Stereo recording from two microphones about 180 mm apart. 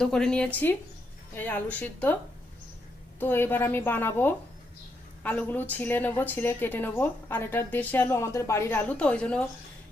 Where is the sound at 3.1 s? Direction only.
10° left (ahead or behind).